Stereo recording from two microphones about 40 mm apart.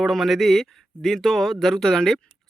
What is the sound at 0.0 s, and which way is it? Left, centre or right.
Speech, centre.